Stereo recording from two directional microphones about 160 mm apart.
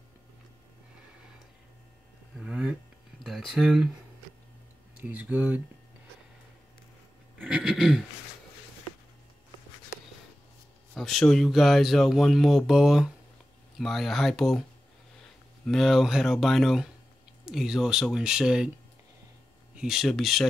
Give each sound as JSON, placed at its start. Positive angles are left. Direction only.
{"t": 2.4, "sound": "a sound", "side_deg": -5}
{"t": 3.3, "sound": "speech", "side_deg": 0}
{"t": 4.9, "sound": "speech", "side_deg": -10}
{"t": 7.3, "sound": "a sound", "side_deg": -5}
{"t": 11.0, "sound": "speech", "side_deg": 0}
{"t": 15.6, "sound": "speech", "side_deg": 0}
{"t": 19.7, "sound": "speech", "side_deg": -5}